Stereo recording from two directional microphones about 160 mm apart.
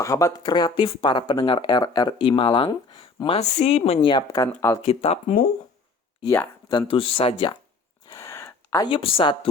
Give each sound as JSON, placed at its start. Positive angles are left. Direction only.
{"t": 0.0, "sound": "speech", "side_deg": 20}
{"t": 4.1, "sound": "speech", "side_deg": 20}
{"t": 4.9, "sound": "speech", "side_deg": 40}
{"t": 6.7, "sound": "speech", "side_deg": 30}
{"t": 8.1, "sound": "a sound", "side_deg": 20}
{"t": 8.9, "sound": "speech", "side_deg": 35}